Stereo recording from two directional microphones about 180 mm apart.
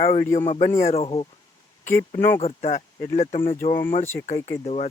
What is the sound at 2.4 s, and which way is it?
Speech, 40° left (ahead or behind).